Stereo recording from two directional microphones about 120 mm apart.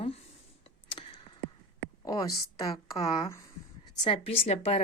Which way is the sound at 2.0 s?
30° left (ahead or behind).